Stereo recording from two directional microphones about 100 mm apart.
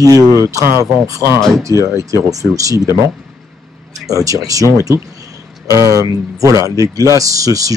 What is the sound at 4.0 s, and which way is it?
Speech, 35° right (ahead or behind).